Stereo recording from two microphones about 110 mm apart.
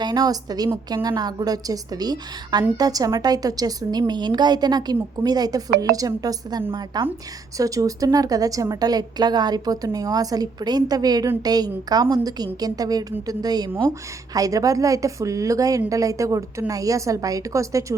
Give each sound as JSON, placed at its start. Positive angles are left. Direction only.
{"t": 0.0, "sound": "a woman's voice", "side_deg": -40}
{"t": 6.6, "sound": "a woman's voice", "side_deg": -45}
{"t": 7.6, "sound": "a woman's voice", "side_deg": -30}